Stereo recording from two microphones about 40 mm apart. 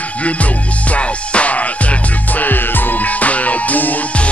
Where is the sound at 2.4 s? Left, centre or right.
Left.